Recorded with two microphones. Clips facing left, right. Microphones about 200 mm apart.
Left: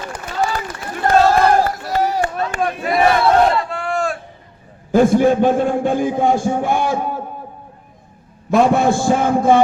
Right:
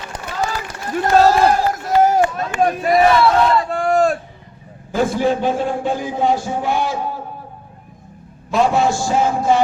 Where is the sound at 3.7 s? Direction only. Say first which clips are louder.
Right 6 dB; 40° right (ahead or behind).